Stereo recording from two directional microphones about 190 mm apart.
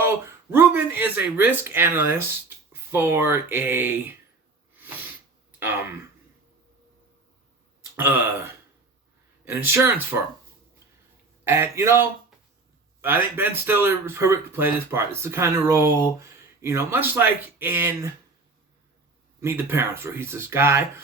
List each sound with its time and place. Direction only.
0.5 s speech: 10° right (ahead or behind)
4.8 s sneeze: 10° right (ahead or behind)
5.5 s speech: 10° right (ahead or behind)
7.9 s speech: 10° right (ahead or behind)
9.4 s speech: 10° right (ahead or behind)
11.4 s speech: 15° right (ahead or behind)
13.3 s speech: 10° right (ahead or behind)
19.4 s speech: 10° right (ahead or behind)